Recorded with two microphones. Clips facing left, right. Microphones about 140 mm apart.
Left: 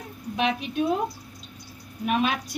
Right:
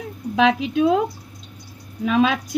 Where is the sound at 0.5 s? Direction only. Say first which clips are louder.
Right 6 dB; 90° right.